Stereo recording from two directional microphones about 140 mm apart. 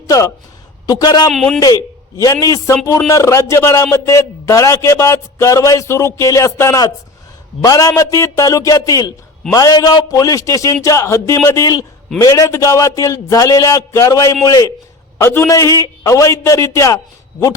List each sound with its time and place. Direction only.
0.1 s a man's voice: 25° left (ahead or behind)
1.3 s a man's voice: centre (ahead or behind)
1.5 s a man's voice: 25° left (ahead or behind)